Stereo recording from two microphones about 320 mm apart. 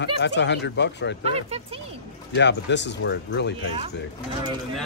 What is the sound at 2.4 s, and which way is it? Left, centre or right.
Speech, left.